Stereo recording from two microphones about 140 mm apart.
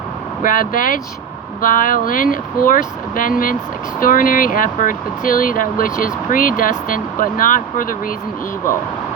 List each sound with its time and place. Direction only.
0.4 s speech: 80° left